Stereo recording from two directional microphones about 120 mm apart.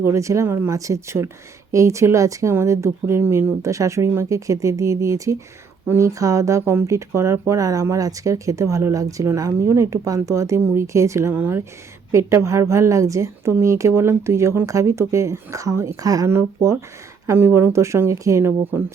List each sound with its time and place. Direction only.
0.0 s speech: 25° right (ahead or behind)